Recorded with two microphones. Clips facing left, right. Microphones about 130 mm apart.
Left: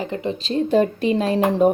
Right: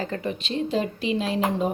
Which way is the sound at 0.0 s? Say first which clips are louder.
Left 4 dB; 20° left (ahead or behind).